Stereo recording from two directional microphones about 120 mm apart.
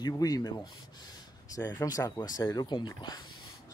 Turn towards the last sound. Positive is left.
turn(degrees=35)  # may be behind; listen again after turning